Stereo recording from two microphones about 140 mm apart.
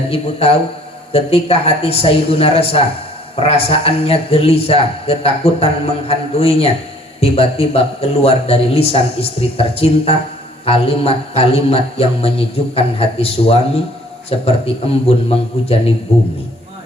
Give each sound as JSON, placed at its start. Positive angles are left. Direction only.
{"t": 0.1, "sound": "a man's voice", "side_deg": 45}